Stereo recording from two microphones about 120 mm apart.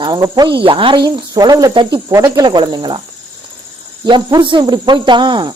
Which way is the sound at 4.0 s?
35° right (ahead or behind).